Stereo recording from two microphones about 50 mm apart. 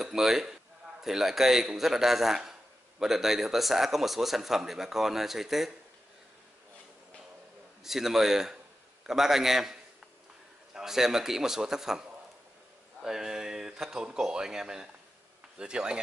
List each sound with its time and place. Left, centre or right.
0.0 s a man's voice: centre
7.8 s a man's voice: centre
13.0 s a man's voice: centre